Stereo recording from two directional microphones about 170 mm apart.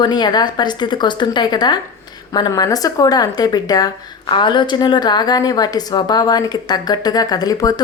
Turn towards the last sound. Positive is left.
turn(degrees=20)  # may be behind; listen again after turning